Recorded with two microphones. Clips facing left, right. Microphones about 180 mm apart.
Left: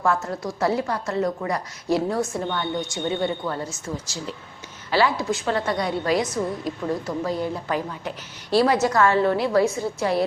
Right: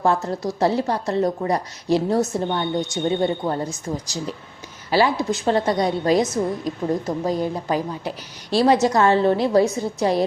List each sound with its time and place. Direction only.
0.0 s a woman's voice: 30° right (ahead or behind)
2.6 s a woman's voice: 20° right (ahead or behind)
3.2 s a woman's voice: 30° right (ahead or behind)
4.9 s a woman's voice: 15° right (ahead or behind)
8.5 s a woman's voice: 20° right (ahead or behind)